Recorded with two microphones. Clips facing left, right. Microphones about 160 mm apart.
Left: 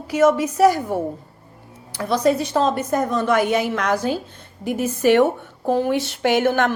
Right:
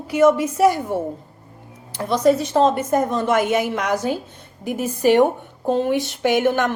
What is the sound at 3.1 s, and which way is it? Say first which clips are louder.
Speech: even; 20° right (ahead or behind).